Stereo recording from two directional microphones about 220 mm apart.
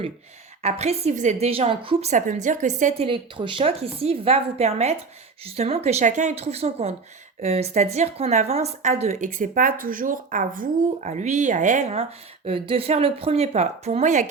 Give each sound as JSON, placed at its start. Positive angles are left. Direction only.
{"t": 0.6, "sound": "a woman's voice", "side_deg": -30}